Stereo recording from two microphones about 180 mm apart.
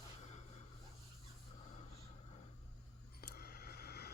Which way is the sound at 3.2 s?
60° left (ahead or behind).